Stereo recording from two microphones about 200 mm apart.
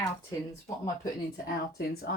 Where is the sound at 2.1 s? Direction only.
50° left (ahead or behind).